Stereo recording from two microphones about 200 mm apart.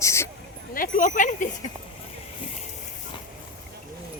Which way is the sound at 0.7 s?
45° left (ahead or behind).